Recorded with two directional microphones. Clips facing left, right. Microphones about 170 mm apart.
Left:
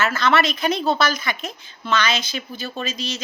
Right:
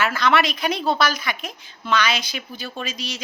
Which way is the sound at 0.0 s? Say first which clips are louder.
Even; 15° right (ahead or behind).